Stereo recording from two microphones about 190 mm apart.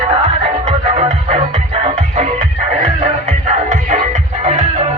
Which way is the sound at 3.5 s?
40° right (ahead or behind).